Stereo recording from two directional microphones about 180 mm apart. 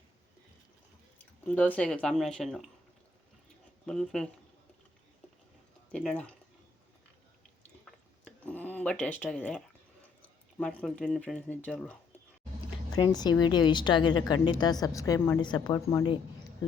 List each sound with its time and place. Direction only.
1.5 s speech: 10° left (ahead or behind)
3.8 s speech: 5° left (ahead or behind)
5.9 s speech: 5° left (ahead or behind)
7.9 s a sound: 5° left (ahead or behind)
10.6 s speech: 5° left (ahead or behind)
13.0 s a woman's voice: 20° left (ahead or behind)